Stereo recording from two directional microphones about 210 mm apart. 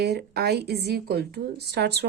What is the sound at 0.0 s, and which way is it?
Speech, 50° right (ahead or behind).